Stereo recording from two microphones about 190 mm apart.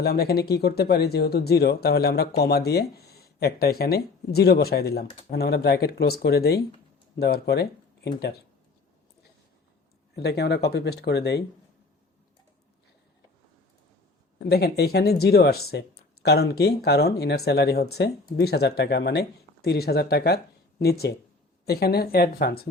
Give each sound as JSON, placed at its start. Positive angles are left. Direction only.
{"t": 0.0, "sound": "speech", "side_deg": 55}
{"t": 10.2, "sound": "speech", "side_deg": 60}
{"t": 14.4, "sound": "speech", "side_deg": 55}